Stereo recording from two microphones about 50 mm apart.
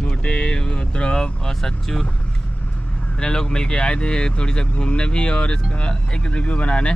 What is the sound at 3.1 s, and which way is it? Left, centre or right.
Speech, centre.